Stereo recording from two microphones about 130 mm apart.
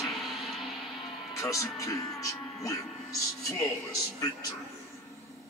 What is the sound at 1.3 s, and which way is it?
A man's voice, 25° left (ahead or behind).